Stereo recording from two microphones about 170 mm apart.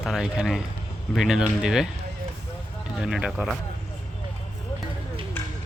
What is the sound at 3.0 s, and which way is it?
Speech, 5° right (ahead or behind).